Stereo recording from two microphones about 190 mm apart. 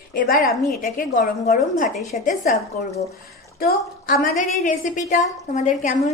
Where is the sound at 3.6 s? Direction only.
50° left (ahead or behind).